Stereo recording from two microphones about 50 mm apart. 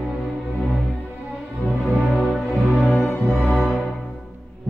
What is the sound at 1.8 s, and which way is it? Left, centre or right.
Music, centre.